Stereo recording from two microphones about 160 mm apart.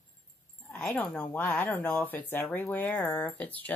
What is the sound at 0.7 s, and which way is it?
Speech, 10° left (ahead or behind).